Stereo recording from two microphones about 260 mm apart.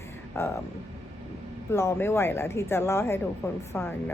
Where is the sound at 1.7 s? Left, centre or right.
Centre.